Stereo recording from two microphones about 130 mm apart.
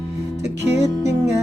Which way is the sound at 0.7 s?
20° right (ahead or behind).